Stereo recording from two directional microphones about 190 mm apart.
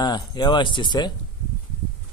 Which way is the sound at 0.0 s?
20° left (ahead or behind).